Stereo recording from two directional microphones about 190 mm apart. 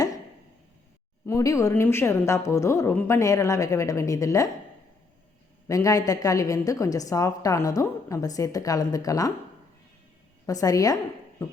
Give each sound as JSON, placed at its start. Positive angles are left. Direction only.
{"t": 1.3, "sound": "a woman's voice", "side_deg": 15}
{"t": 5.6, "sound": "a woman's voice", "side_deg": 15}
{"t": 10.4, "sound": "a woman's voice", "side_deg": 20}